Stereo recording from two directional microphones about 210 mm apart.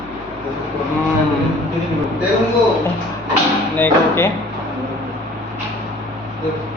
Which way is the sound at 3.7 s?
10° left (ahead or behind).